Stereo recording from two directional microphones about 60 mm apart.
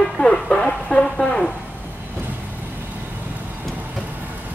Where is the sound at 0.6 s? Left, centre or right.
Centre.